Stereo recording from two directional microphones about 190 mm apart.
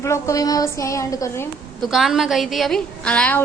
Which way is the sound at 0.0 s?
15° left (ahead or behind).